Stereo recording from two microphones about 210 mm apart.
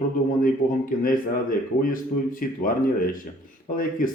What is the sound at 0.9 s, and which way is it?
Speech, 40° left (ahead or behind).